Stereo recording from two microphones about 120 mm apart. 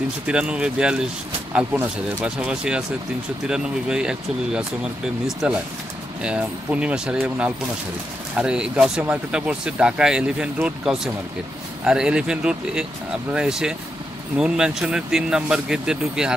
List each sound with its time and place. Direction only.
0.3 s speech: 10° right (ahead or behind)